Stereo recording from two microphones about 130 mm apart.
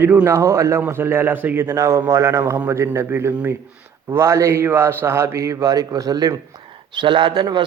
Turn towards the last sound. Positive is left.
turn(degrees=-35)  # may be behind; listen again after turning